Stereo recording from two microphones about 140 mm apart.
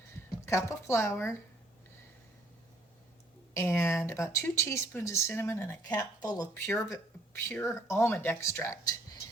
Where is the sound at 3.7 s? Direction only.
15° left (ahead or behind).